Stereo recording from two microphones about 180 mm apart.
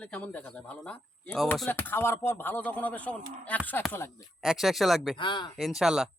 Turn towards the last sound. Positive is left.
turn(degrees=-5)  # may be behind; listen again after turning